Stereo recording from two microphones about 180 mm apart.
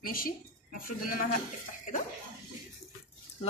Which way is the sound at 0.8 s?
50° left (ahead or behind).